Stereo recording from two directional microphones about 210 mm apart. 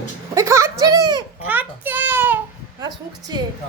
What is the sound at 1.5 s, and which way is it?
Child singing, 10° right (ahead or behind).